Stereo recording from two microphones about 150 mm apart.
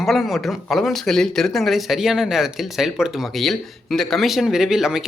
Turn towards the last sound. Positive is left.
turn(degrees=-5)  # may be behind; listen again after turning